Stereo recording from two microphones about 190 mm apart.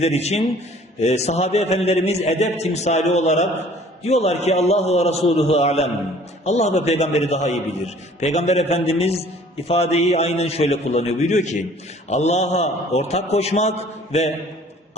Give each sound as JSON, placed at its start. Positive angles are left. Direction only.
{"t": 0.0, "sound": "a man's voice", "side_deg": 35}